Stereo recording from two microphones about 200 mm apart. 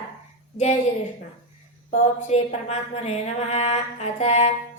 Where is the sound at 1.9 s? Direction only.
35° left (ahead or behind).